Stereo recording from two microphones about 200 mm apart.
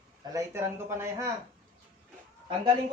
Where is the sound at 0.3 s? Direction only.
10° right (ahead or behind).